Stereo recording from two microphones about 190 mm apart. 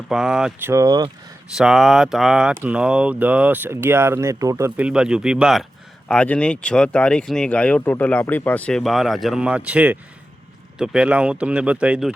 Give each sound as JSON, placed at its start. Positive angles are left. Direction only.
{"t": 0.1, "sound": "speech", "side_deg": -5}
{"t": 0.7, "sound": "speech", "side_deg": -20}
{"t": 1.5, "sound": "speech", "side_deg": 0}